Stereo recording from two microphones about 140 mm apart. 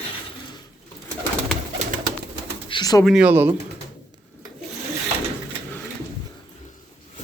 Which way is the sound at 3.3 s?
15° right (ahead or behind).